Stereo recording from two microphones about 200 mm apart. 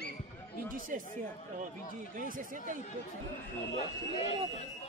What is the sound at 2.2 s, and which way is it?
Speech, 40° right (ahead or behind).